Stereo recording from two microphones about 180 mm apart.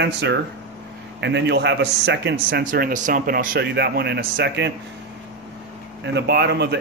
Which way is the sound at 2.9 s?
50° right (ahead or behind).